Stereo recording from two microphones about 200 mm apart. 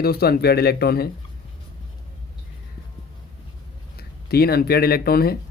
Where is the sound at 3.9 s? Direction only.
50° left (ahead or behind).